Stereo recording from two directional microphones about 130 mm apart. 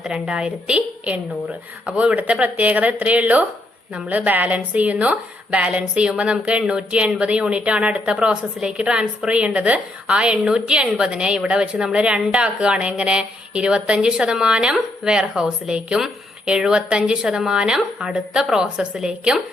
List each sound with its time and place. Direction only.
0.0 s a woman's voice: 5° right (ahead or behind)